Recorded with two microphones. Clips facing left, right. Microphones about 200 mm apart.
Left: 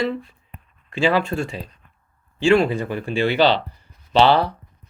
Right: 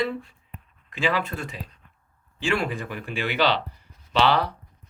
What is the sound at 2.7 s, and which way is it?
Speech, 35° left (ahead or behind).